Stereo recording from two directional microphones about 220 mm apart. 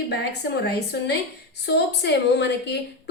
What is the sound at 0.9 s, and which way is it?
A woman's voice, 45° left (ahead or behind).